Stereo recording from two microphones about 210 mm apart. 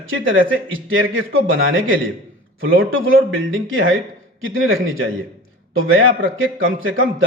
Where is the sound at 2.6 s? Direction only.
70° right (ahead or behind).